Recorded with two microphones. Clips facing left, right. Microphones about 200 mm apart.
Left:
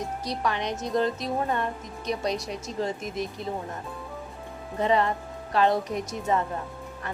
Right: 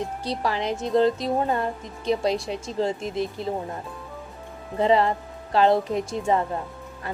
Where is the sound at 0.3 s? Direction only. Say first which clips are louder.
Right 3 dB; 30° right (ahead or behind).